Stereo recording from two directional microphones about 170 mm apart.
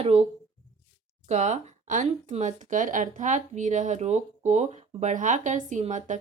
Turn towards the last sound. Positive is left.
turn(degrees=-45)  # may be behind; listen again after turning